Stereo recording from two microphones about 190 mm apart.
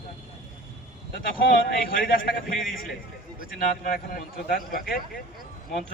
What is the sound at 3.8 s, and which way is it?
Speech, 50° left (ahead or behind).